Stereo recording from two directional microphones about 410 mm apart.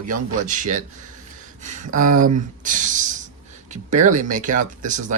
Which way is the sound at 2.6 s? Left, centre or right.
Centre.